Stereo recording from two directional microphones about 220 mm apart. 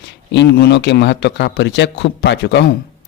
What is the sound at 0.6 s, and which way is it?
A man's voice, 50° left (ahead or behind).